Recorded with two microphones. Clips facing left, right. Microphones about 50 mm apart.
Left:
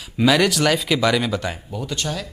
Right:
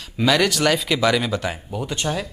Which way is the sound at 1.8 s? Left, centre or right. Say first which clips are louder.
Right 2 dB; centre.